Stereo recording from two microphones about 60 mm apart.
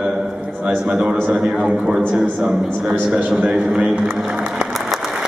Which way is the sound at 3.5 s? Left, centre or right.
Centre.